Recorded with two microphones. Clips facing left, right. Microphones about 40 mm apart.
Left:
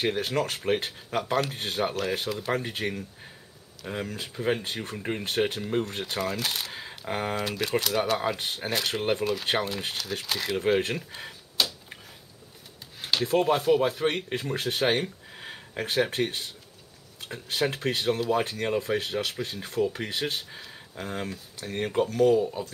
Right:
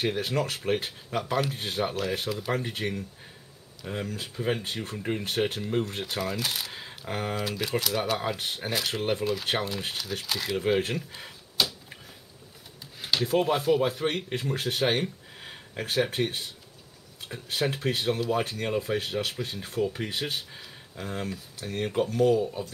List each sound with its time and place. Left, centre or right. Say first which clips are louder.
0.0 s speech: left 1 dB; centre
11.6 s a sound: even; centre
13.4 s speech: left 2 dB; centre
21.0 s speech: left 1 dB; centre
21.3 s speech: even; centre